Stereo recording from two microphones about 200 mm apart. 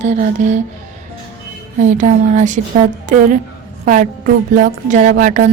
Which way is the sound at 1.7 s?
40° right (ahead or behind).